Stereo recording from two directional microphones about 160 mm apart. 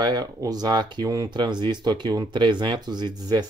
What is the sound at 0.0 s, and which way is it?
Speech, 25° right (ahead or behind).